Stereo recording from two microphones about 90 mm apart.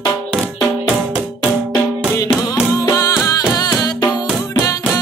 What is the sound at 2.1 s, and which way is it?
Music, 40° left (ahead or behind).